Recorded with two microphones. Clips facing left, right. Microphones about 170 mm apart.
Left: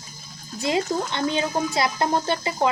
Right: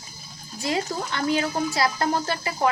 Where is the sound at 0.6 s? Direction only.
20° left (ahead or behind).